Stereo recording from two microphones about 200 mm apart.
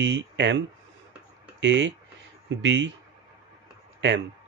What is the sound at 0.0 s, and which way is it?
Speech, 65° right (ahead or behind).